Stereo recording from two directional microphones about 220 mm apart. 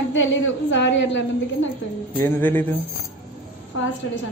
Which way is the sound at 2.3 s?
10° left (ahead or behind).